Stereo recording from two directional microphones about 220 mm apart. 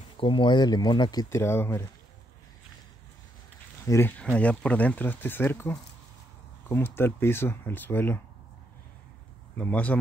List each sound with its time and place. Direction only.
0.2 s speech: 20° left (ahead or behind)
3.8 s speech: 10° left (ahead or behind)
9.6 s speech: 5° left (ahead or behind)